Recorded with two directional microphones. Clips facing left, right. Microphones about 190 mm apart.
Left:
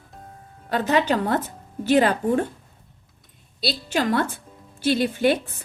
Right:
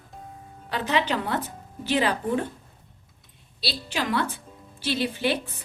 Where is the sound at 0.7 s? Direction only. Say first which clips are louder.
Left 5 dB; 45° left (ahead or behind).